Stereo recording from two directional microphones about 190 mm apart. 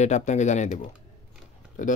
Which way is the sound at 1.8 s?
45° left (ahead or behind).